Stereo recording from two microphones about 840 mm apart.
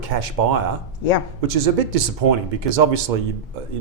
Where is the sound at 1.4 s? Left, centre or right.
Right.